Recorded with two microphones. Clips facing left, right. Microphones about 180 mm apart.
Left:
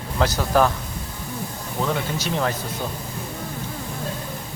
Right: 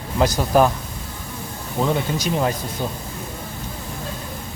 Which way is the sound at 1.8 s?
15° right (ahead or behind).